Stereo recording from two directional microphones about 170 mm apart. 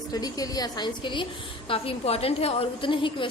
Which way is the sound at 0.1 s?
20° left (ahead or behind).